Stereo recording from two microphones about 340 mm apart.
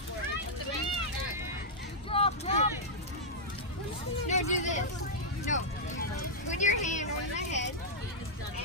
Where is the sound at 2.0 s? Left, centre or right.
Centre.